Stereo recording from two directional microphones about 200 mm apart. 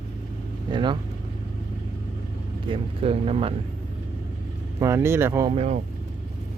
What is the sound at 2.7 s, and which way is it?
Speech, 30° right (ahead or behind).